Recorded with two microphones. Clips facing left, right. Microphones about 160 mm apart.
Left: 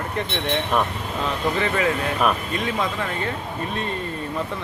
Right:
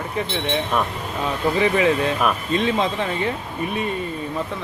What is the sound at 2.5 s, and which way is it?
Speech, 25° right (ahead or behind).